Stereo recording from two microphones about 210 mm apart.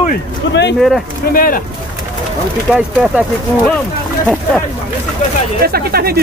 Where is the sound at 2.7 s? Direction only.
5° right (ahead or behind).